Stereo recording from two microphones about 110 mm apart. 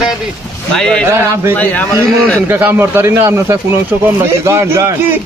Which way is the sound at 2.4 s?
15° right (ahead or behind).